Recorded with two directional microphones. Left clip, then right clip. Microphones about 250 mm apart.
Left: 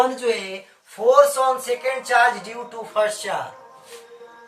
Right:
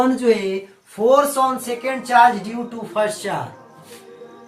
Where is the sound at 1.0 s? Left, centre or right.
Centre.